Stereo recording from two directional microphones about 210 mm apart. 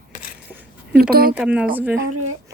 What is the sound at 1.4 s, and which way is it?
Speech, 5° right (ahead or behind).